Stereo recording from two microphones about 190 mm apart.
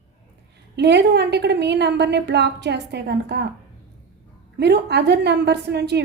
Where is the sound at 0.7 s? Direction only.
60° right (ahead or behind).